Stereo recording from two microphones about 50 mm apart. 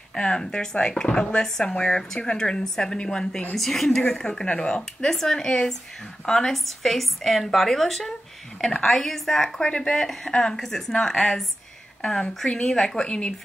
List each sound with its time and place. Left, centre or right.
0.1 s speech: centre
3.5 s a woman's voice: centre
4.3 s speech: centre
5.0 s a woman's voice: centre